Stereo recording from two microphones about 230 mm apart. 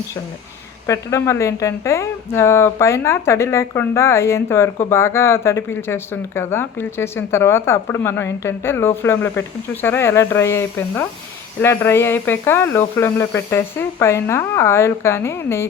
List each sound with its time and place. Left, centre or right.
0.9 s a woman's voice: centre